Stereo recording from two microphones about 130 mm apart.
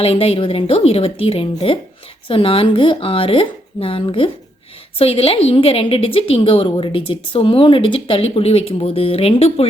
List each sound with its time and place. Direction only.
0.0 s a woman's voice: 50° left (ahead or behind)